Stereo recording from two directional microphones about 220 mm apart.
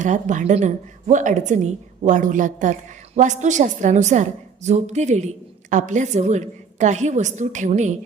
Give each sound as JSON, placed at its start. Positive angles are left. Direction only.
{"t": 0.0, "sound": "a woman's voice", "side_deg": -35}